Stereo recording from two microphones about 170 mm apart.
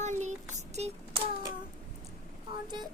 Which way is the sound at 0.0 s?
45° right (ahead or behind).